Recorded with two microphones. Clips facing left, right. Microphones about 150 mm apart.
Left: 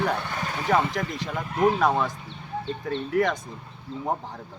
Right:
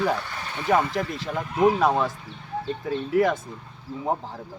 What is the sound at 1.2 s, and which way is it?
Speech, 10° right (ahead or behind).